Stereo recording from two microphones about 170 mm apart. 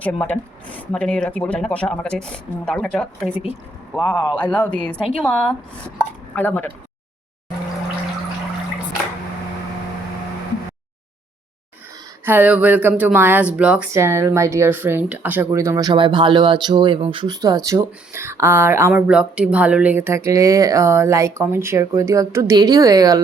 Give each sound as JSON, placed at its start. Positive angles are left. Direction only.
{"t": 0.0, "sound": "speech", "side_deg": 10}
{"t": 3.2, "sound": "speech", "side_deg": -10}
{"t": 4.0, "sound": "a man's voice", "side_deg": 25}
{"t": 4.6, "sound": "a woman's voice", "side_deg": 5}
{"t": 12.2, "sound": "speech", "side_deg": -10}
{"t": 15.9, "sound": "speech", "side_deg": -30}